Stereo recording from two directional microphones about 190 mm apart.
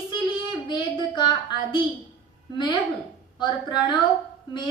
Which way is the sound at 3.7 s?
20° left (ahead or behind).